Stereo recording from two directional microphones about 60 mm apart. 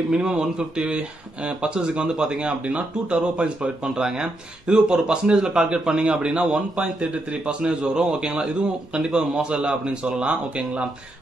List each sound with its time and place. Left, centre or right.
0.1 s speech: centre